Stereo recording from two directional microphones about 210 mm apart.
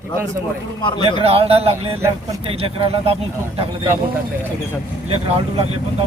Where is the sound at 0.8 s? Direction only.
20° left (ahead or behind).